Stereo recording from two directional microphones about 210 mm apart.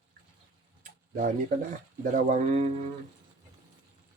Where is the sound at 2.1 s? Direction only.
35° right (ahead or behind).